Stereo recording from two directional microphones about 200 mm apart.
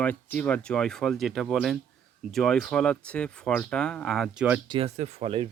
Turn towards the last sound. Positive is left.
turn(degrees=-25)  # may be behind; listen again after turning